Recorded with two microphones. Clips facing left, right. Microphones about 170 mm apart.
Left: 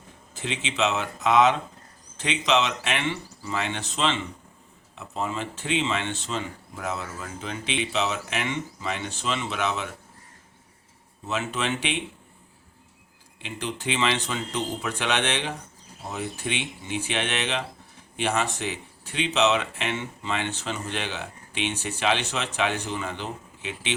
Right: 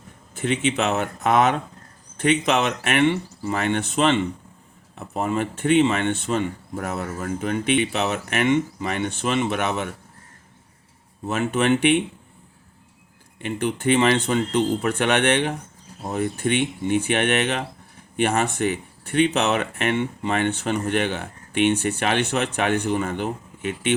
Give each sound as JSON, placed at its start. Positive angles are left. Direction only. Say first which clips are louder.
{"t": 0.3, "sound": "speech", "louder": "right 6 dB", "side_deg": -55}
{"t": 11.3, "sound": "speech", "louder": "right 8 dB", "side_deg": -55}
{"t": 13.4, "sound": "speech", "louder": "right 8 dB", "side_deg": -55}